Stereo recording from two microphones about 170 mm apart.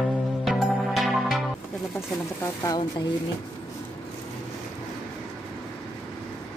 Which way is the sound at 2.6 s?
25° left (ahead or behind).